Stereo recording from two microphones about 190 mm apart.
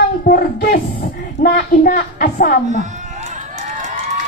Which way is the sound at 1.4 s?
50° left (ahead or behind).